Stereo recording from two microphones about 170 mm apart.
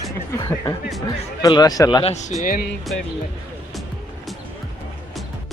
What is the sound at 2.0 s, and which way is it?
Speech, 40° left (ahead or behind).